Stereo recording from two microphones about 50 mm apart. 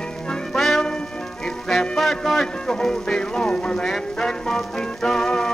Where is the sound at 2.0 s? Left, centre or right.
Centre.